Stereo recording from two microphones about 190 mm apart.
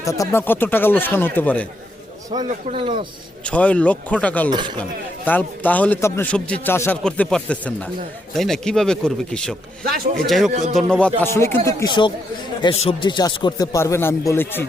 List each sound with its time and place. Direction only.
0.0 s a man's voice: 15° left (ahead or behind)
2.5 s speech: 30° right (ahead or behind)
3.4 s a man's voice: 5° left (ahead or behind)
4.5 s speech: 25° right (ahead or behind)
4.8 s a man's voice: 10° left (ahead or behind)
10.5 s speech: 40° right (ahead or behind)
10.8 s a man's voice: 5° left (ahead or behind)